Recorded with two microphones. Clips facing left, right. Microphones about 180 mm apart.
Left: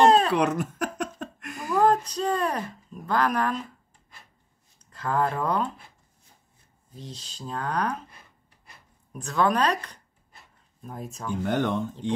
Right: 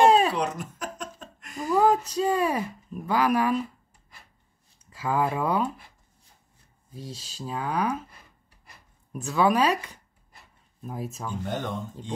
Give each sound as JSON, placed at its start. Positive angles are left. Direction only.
{"t": 0.0, "sound": "cough", "side_deg": -10}
{"t": 0.3, "sound": "a sound", "side_deg": 60}
{"t": 1.7, "sound": "speech", "side_deg": -10}
{"t": 4.8, "sound": "speech", "side_deg": -5}
{"t": 6.9, "sound": "speech", "side_deg": -10}
{"t": 9.1, "sound": "speech", "side_deg": -5}
{"t": 11.4, "sound": "speech", "side_deg": 70}